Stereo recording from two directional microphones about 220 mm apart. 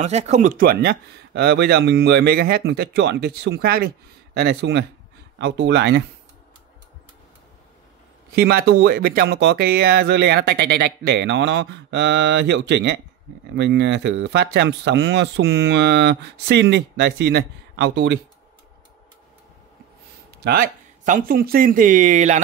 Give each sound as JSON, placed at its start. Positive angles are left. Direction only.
{"t": 0.0, "sound": "speech", "side_deg": -30}
{"t": 8.3, "sound": "speech", "side_deg": -45}
{"t": 20.4, "sound": "speech", "side_deg": -45}